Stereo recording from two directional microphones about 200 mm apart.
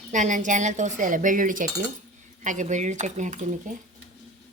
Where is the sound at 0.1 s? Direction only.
40° right (ahead or behind).